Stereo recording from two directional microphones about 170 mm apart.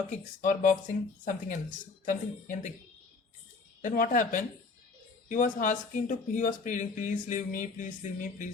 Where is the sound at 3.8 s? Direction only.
50° left (ahead or behind).